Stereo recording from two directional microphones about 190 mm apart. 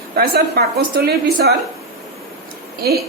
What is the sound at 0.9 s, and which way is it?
Speech, 55° right (ahead or behind).